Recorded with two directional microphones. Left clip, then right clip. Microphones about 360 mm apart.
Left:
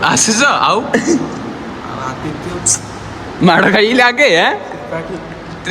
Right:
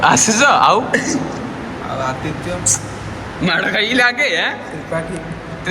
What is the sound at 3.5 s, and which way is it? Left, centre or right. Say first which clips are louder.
A man's voice: left 6 dB; left.